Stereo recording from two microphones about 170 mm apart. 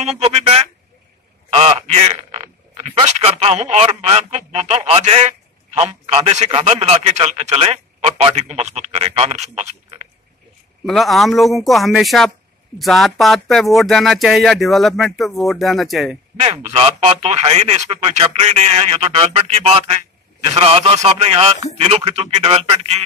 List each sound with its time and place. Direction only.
0.0 s telephone: 35° right (ahead or behind)
1.5 s a man's voice: 35° right (ahead or behind)
10.9 s speech: centre (ahead or behind)
16.3 s a man's voice: 35° right (ahead or behind)